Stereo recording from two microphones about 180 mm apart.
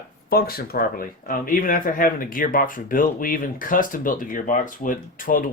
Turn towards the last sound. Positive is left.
turn(degrees=50)  # may be behind; listen again after turning